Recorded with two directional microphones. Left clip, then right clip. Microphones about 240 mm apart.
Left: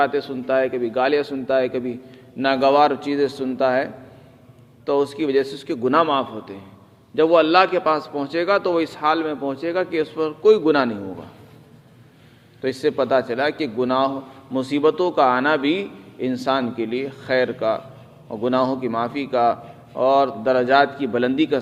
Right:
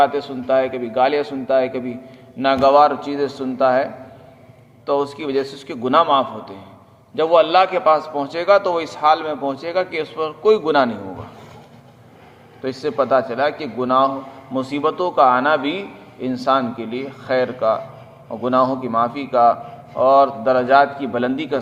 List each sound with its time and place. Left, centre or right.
0.0 s a man's voice: left
4.9 s a man's voice: left
12.6 s a man's voice: left